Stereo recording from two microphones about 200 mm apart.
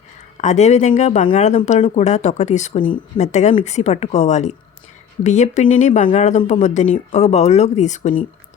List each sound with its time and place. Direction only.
0.4 s speech: 35° left (ahead or behind)